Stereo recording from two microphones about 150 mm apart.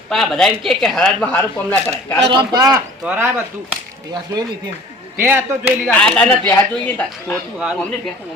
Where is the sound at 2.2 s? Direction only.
30° right (ahead or behind).